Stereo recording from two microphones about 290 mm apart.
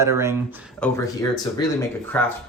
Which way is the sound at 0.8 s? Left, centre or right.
Centre.